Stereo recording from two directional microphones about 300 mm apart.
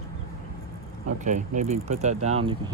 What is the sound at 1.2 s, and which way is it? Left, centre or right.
Speech, right.